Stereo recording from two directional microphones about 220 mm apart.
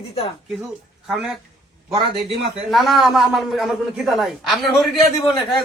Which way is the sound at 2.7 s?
Centre (ahead or behind).